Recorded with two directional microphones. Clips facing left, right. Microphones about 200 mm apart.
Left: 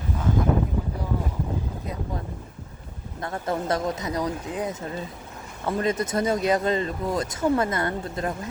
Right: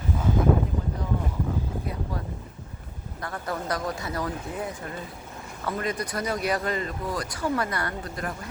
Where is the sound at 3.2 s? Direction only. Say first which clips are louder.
Left 4 dB; 25° left (ahead or behind).